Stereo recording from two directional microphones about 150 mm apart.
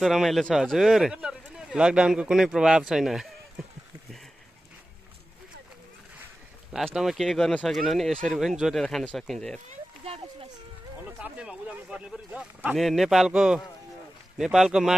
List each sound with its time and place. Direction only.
0.0 s speech: centre (ahead or behind)
6.7 s speech: centre (ahead or behind)
9.7 s a sound: 40° right (ahead or behind)
11.1 s speech: 10° right (ahead or behind)